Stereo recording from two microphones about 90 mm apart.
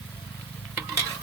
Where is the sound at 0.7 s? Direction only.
35° right (ahead or behind).